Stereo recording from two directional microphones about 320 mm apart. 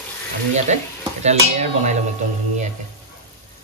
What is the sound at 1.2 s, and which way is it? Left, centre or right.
Speech, right.